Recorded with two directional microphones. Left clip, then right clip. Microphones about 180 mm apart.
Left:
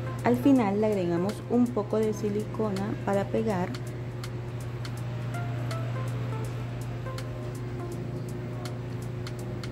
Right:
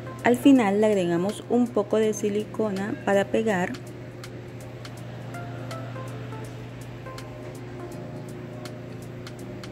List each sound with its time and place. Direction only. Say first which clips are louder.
0.2 s a woman's voice: right 5 dB; 15° right (ahead or behind)
1.2 s speech: right 3 dB; centre (ahead or behind)
1.8 s a woman's voice: right 5 dB; 20° right (ahead or behind)